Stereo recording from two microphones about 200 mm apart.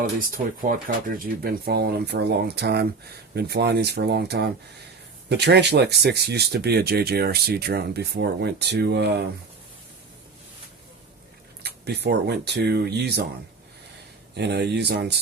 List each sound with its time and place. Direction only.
0.0 s speech: 45° right (ahead or behind)
11.6 s speech: 55° right (ahead or behind)
14.3 s speech: 55° right (ahead or behind)